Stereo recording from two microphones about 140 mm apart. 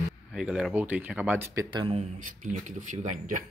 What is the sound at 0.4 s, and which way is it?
Speech, 5° right (ahead or behind).